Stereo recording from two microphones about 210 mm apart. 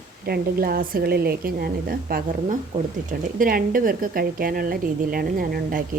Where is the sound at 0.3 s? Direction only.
45° right (ahead or behind).